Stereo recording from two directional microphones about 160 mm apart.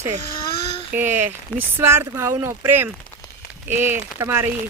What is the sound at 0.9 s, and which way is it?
Speech, 15° right (ahead or behind).